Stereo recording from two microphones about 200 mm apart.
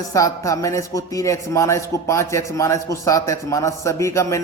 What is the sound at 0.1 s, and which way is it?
Speech, 15° left (ahead or behind).